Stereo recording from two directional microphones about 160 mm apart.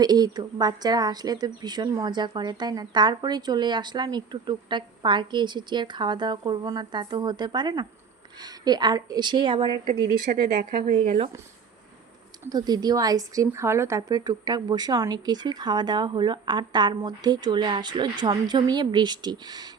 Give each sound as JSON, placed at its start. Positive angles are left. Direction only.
{"t": 0.0, "sound": "a woman's voice", "side_deg": -25}
{"t": 10.3, "sound": "speech", "side_deg": -70}
{"t": 12.5, "sound": "a woman's voice", "side_deg": -25}